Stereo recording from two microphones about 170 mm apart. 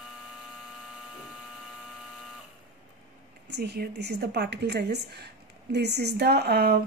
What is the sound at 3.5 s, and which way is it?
A woman's voice, 85° right.